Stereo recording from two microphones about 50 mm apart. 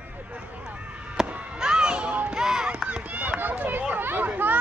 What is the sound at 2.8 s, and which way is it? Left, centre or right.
Speech, right.